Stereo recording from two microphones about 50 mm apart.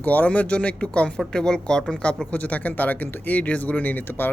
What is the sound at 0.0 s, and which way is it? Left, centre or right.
Speech, left.